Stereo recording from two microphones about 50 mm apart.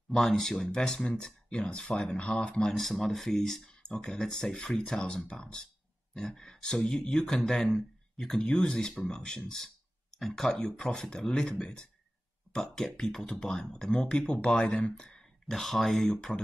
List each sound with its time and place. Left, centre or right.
0.1 s speech: centre
2.7 s speech: centre; by 15.0 s left
15.0 s speech: centre